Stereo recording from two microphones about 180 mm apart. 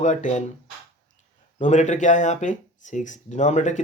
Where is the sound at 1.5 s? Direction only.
40° left (ahead or behind).